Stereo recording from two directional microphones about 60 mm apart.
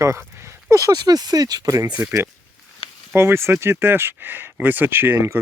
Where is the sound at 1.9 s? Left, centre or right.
Right.